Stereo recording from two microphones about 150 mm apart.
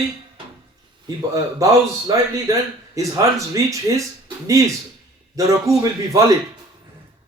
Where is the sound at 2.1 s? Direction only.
20° right (ahead or behind).